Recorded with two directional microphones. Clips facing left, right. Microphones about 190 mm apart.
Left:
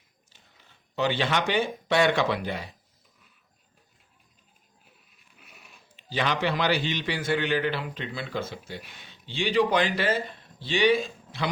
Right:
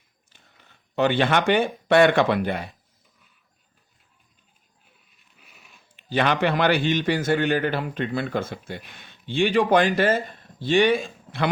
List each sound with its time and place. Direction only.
0.3 s speech: 55° right (ahead or behind)
5.1 s a sound: centre (ahead or behind)
6.0 s a man's voice: 55° right (ahead or behind)